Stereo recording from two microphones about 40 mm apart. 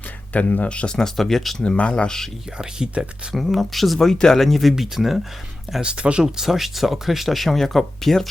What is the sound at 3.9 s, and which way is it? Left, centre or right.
Speech, centre.